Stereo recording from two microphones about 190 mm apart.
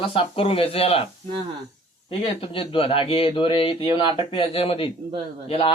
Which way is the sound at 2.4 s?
30° left (ahead or behind).